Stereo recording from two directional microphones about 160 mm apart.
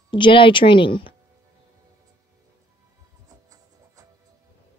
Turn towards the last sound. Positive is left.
turn(degrees=-20)  # may be behind; listen again after turning